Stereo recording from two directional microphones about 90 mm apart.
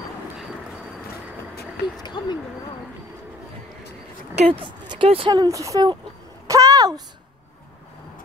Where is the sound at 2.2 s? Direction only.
60° left (ahead or behind).